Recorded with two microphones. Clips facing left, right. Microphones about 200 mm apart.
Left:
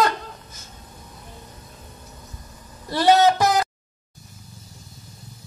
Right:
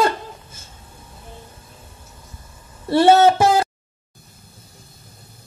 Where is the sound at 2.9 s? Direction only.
30° right (ahead or behind).